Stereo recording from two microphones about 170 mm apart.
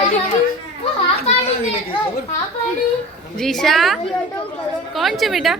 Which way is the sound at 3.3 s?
Centre (ahead or behind).